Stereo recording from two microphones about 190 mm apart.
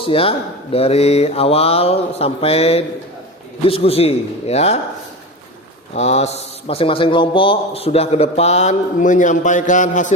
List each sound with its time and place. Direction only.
0.0 s a man's voice: 30° left (ahead or behind)
5.9 s a man's voice: 35° left (ahead or behind)